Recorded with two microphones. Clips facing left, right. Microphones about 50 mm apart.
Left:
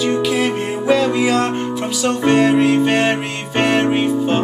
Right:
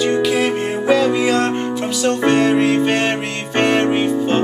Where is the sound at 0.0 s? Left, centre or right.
Centre.